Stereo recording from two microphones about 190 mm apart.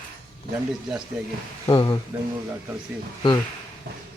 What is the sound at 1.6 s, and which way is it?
Speech, 20° left (ahead or behind).